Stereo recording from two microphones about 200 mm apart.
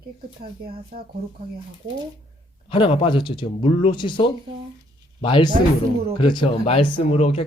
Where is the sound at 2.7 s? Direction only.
25° left (ahead or behind).